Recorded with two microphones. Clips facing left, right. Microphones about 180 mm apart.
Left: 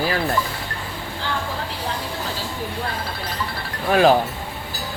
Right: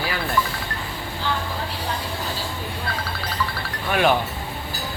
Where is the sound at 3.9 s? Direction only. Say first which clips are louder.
Left 5 dB; 35° left (ahead or behind).